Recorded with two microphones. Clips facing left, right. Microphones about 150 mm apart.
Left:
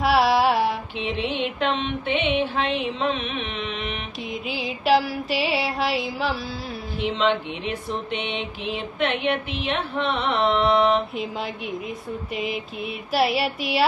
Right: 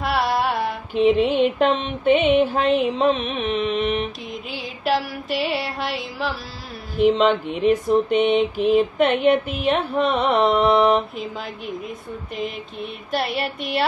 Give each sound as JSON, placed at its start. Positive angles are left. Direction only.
{"t": 0.0, "sound": "female singing", "side_deg": 0}
{"t": 0.9, "sound": "mantra", "side_deg": -45}
{"t": 4.3, "sound": "music", "side_deg": 0}
{"t": 7.0, "sound": "mantra", "side_deg": -40}
{"t": 12.4, "sound": "music", "side_deg": 5}